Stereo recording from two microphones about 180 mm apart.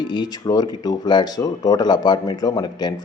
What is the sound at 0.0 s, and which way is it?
A man's voice, 25° left (ahead or behind).